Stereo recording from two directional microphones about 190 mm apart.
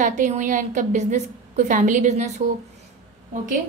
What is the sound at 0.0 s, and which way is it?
A woman's voice, 40° right (ahead or behind).